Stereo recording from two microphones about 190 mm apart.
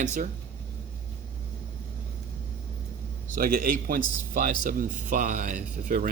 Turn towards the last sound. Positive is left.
turn(degrees=-45)  # may be behind; listen again after turning